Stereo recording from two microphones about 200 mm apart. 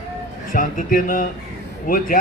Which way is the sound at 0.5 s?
45° left (ahead or behind).